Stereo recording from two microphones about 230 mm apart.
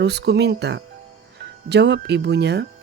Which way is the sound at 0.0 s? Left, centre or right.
Right.